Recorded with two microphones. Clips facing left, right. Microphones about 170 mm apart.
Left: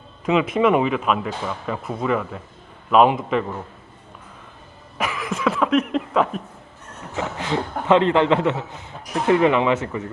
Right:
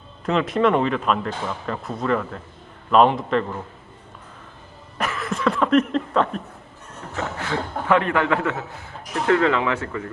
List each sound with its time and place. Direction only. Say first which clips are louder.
0.3 s speech: left 2 dB; 5° left (ahead or behind)
4.9 s a sound: left 1 dB; 10° left (ahead or behind)
5.3 s speech: right 1 dB; centre (ahead or behind)
7.2 s a man's voice: left 2 dB; 20° left (ahead or behind)